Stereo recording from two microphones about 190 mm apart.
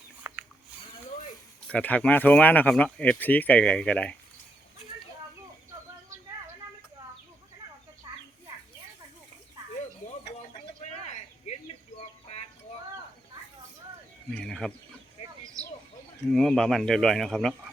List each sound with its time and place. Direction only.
0.2 s a sound: 10° right (ahead or behind)
1.6 s speech: 10° left (ahead or behind)
11.5 s bird: 35° left (ahead or behind)
14.3 s speech: 5° left (ahead or behind)
15.6 s a sound: 15° right (ahead or behind)
16.3 s speech: 5° left (ahead or behind)